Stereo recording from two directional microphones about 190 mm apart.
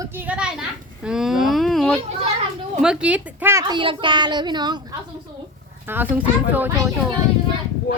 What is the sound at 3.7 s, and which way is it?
A child's voice, 25° right (ahead or behind).